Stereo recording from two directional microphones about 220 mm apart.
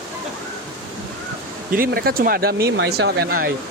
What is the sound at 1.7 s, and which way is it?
Speech, 40° right (ahead or behind).